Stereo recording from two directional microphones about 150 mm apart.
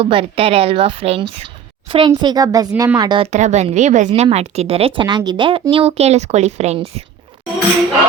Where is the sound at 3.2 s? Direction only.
50° right (ahead or behind).